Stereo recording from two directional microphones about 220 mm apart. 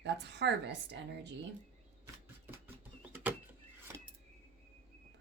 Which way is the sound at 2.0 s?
10° right (ahead or behind).